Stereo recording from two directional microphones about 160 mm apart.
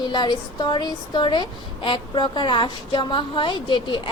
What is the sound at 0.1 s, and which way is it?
Speech, 25° left (ahead or behind).